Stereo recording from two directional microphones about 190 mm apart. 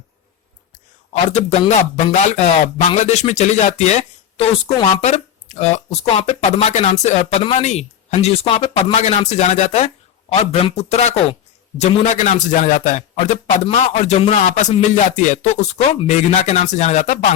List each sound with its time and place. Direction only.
1.3 s speech: 35° left (ahead or behind)